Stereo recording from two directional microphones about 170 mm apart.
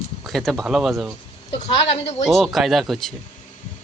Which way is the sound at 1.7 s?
35° left (ahead or behind).